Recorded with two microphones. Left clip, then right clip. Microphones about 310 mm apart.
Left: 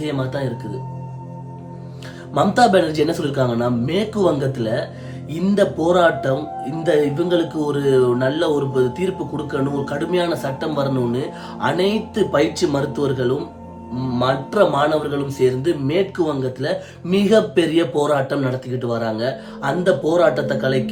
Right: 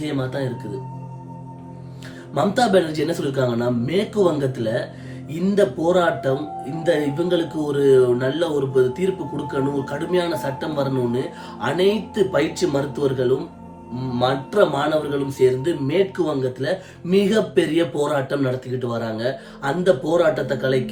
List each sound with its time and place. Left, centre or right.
0.0 s speech: centre
2.3 s speech: centre